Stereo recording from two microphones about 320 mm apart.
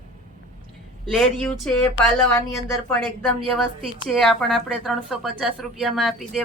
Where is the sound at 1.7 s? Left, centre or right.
Centre.